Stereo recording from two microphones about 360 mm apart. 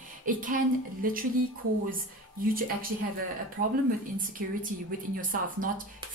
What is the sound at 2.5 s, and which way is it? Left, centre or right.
Speech, right.